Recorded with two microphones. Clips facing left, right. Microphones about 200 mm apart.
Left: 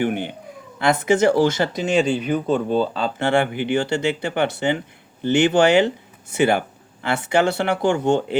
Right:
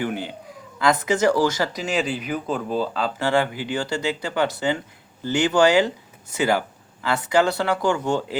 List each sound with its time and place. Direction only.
0.0 s speech: 20° left (ahead or behind)